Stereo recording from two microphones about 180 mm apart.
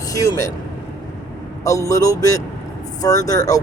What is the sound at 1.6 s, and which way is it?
Speech, 20° left (ahead or behind).